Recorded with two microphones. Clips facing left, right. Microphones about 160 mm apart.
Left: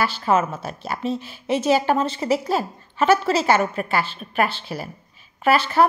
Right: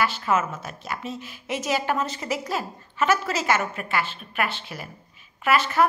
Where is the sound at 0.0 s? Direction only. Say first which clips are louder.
Left 3 dB; 30° left (ahead or behind).